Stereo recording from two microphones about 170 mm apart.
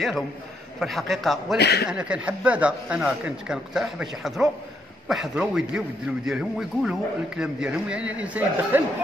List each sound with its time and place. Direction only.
0.7 s a man's voice: centre (ahead or behind)
1.6 s a man's voice: 70° left (ahead or behind)
1.9 s a man's voice: 5° right (ahead or behind)